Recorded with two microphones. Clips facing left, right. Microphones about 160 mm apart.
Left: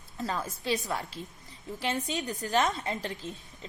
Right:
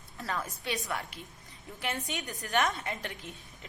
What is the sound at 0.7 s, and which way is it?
A woman's voice, 35° left (ahead or behind).